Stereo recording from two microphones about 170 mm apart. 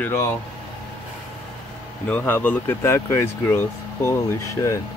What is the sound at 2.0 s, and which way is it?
Speech, 10° left (ahead or behind).